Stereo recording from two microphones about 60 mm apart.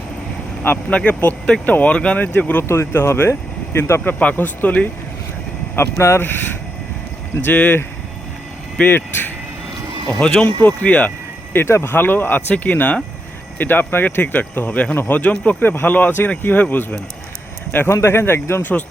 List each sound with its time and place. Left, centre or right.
0.6 s speech: left
2.9 s speech: left
4.0 s speech: left
5.7 s speech: left
7.5 s speech: left
9.0 s speech: left
10.2 s speech: centre
10.4 s speech: left
11.5 s speech: left
15.2 s speech: left
17.8 s speech: left